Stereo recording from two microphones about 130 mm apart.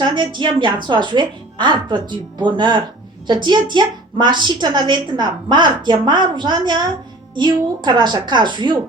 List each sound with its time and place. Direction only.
0.1 s a woman's voice: 35° right (ahead or behind)